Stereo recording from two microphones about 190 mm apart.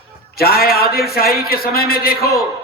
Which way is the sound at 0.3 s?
55° left (ahead or behind).